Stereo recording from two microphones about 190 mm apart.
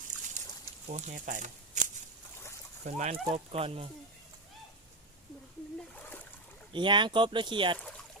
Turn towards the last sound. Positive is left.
turn(degrees=-25)  # may be behind; listen again after turning